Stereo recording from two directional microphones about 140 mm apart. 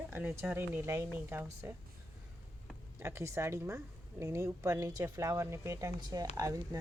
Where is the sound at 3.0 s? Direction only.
20° right (ahead or behind).